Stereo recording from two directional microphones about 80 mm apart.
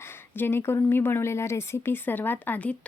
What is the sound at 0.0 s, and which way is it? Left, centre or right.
Speech, left.